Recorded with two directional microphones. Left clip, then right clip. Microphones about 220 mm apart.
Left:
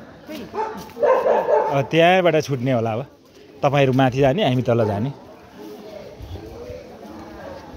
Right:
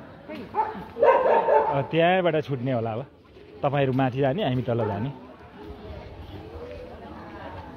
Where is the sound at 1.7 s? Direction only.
20° left (ahead or behind).